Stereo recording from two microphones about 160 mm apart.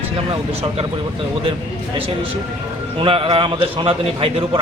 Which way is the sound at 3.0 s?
35° right (ahead or behind).